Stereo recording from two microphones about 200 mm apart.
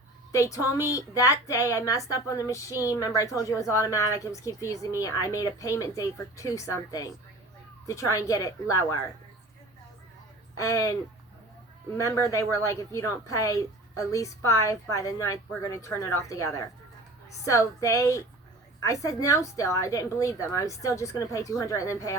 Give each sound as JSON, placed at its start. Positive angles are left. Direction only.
{"t": 0.3, "sound": "speech", "side_deg": 15}
{"t": 10.6, "sound": "speech", "side_deg": 15}
{"t": 11.9, "sound": "speech", "side_deg": 15}